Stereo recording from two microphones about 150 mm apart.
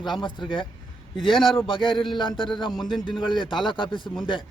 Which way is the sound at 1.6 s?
35° left (ahead or behind).